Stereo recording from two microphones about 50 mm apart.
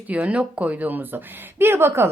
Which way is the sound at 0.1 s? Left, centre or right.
Right.